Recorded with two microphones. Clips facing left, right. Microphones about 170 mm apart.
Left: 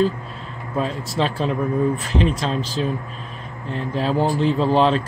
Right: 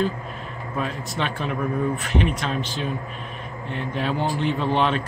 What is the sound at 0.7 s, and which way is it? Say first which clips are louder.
Speech: left 5 dB; 35° left (ahead or behind).